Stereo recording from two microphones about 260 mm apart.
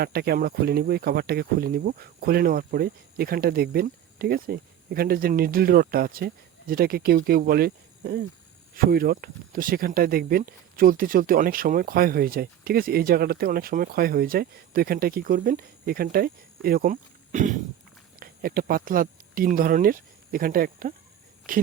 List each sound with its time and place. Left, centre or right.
0.0 s speech: right